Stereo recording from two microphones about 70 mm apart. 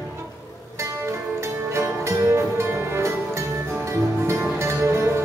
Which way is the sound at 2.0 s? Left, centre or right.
Right.